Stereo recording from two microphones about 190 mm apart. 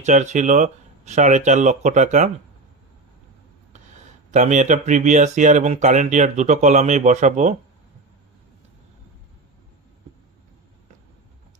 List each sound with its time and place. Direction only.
0.0 s speech: 40° right (ahead or behind)
4.3 s speech: 40° right (ahead or behind)